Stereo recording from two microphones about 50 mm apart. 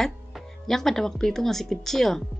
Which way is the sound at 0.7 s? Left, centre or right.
Centre.